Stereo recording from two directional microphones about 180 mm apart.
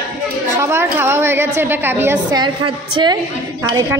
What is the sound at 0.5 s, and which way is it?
A woman's voice, 15° right (ahead or behind).